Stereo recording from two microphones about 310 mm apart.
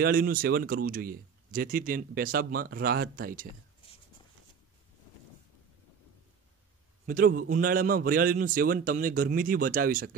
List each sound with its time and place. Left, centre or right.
0.0 s speech: right
7.1 s speech: right